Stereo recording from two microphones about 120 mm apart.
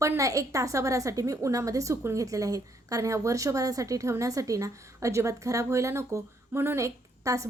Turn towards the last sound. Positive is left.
turn(degrees=-25)  # may be behind; listen again after turning